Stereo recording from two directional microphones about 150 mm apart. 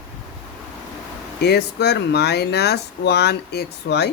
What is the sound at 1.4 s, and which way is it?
Speech, 90° left.